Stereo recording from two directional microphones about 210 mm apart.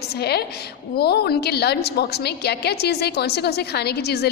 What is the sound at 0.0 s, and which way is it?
A woman's voice, 50° left (ahead or behind).